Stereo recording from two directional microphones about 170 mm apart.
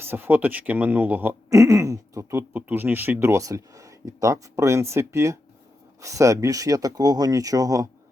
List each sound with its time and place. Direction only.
0.0 s speech: 10° right (ahead or behind)